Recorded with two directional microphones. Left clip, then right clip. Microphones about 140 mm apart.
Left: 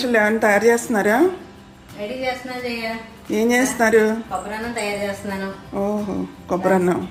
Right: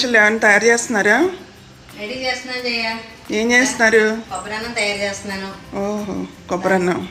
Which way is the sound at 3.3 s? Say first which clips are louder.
Right 3 dB; 10° left (ahead or behind).